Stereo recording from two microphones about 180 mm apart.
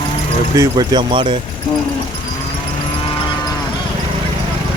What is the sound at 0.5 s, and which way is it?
Speech, 20° right (ahead or behind).